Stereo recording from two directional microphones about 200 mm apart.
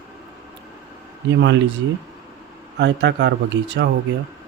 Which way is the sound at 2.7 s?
60° right (ahead or behind).